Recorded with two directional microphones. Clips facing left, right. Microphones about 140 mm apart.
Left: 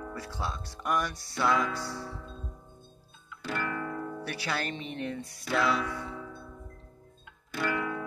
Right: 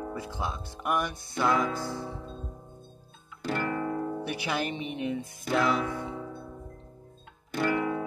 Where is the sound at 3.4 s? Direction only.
35° right (ahead or behind).